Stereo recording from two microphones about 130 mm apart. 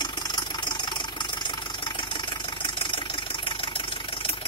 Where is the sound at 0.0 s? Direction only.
35° left (ahead or behind).